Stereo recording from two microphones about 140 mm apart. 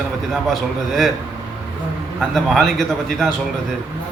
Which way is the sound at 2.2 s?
Centre (ahead or behind).